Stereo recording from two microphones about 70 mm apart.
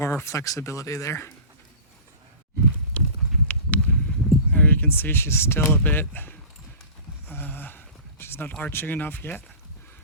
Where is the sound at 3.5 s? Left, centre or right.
Left.